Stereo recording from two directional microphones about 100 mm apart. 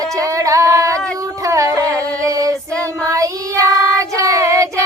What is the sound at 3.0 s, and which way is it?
Child singing, 35° right (ahead or behind).